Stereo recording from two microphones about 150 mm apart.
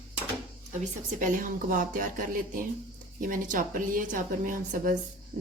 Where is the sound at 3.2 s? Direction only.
60° right (ahead or behind).